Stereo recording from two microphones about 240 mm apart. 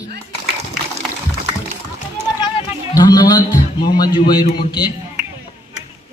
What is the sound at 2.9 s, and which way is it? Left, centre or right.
A man's voice, centre.